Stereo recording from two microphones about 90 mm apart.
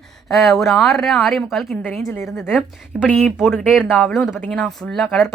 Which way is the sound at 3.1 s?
15° left (ahead or behind).